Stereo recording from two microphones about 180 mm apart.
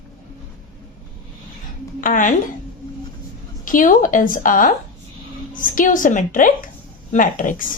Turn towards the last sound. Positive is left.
turn(degrees=45)  # may be behind; listen again after turning